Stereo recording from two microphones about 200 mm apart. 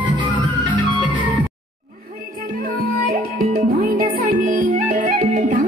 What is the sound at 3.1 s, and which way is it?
Music, 45° right (ahead or behind).